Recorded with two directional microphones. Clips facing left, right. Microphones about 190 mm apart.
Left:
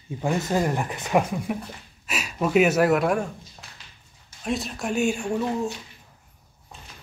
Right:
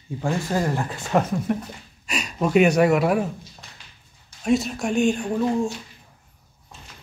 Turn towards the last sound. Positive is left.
turn(degrees=-5)  # may be behind; listen again after turning